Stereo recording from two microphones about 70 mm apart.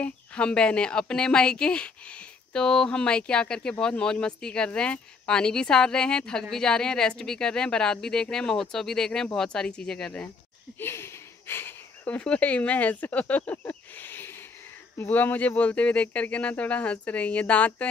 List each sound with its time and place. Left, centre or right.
0.0 s a woman's voice: centre
10.8 s a sound: left
12.2 s speech: centre